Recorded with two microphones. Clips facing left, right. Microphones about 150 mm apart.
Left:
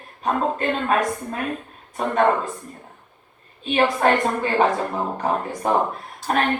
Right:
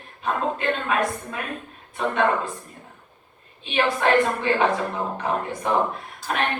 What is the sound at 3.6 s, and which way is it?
Speech, 40° left (ahead or behind).